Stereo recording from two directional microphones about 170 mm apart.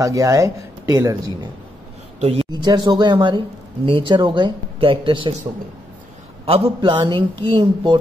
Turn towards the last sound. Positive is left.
turn(degrees=-30)  # may be behind; listen again after turning